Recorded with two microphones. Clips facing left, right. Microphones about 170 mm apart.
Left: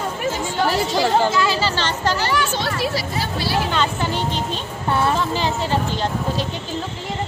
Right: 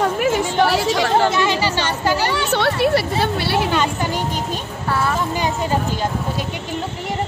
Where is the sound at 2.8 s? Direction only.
60° right (ahead or behind).